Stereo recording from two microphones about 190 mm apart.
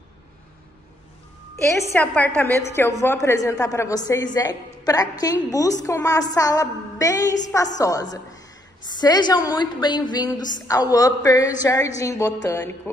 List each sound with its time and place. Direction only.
1.9 s a woman's voice: 10° left (ahead or behind)